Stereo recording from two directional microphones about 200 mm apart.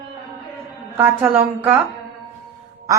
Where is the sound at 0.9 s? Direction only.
10° right (ahead or behind).